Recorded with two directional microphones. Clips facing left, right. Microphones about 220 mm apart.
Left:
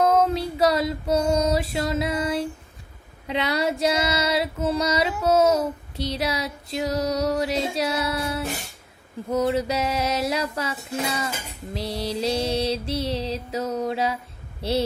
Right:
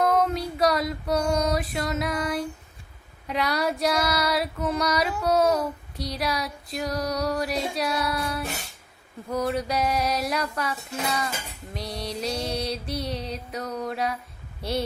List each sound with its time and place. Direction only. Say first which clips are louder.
0.0 s female singing: left 3 dB; 25° left (ahead or behind)
14.6 s a woman's voice: left 4 dB; 25° left (ahead or behind)